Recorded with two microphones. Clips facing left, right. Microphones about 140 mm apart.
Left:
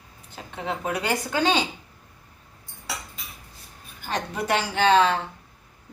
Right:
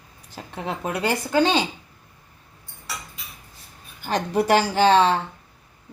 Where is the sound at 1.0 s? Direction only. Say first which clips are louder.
Right 4 dB; 35° right (ahead or behind).